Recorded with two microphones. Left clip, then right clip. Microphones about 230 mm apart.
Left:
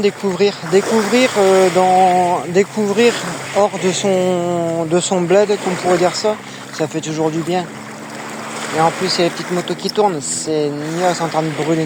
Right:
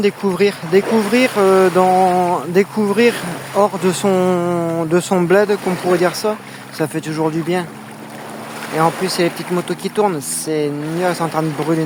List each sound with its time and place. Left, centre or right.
0.0 s speech: centre
8.8 s speech: centre